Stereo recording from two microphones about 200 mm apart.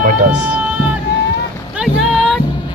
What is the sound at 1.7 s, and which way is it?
Boat, centre (ahead or behind).